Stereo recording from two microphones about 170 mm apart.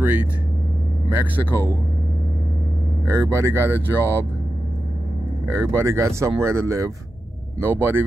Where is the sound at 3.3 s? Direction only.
15° right (ahead or behind).